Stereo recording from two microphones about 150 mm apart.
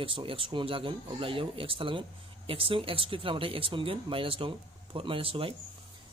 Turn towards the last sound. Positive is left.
turn(degrees=-35)  # may be behind; listen again after turning